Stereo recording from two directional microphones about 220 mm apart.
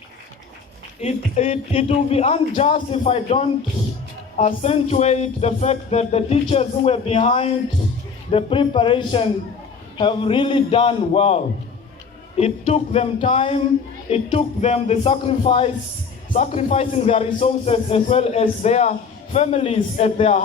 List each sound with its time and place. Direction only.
1.0 s a man's voice: 30° left (ahead or behind)
12.4 s a man's voice: 30° left (ahead or behind)